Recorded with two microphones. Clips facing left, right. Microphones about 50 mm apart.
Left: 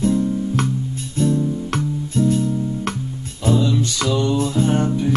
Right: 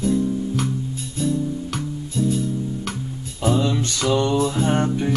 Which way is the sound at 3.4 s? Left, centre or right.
Right.